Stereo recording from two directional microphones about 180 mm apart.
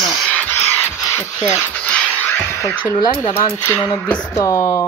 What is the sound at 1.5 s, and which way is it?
Music, 10° left (ahead or behind).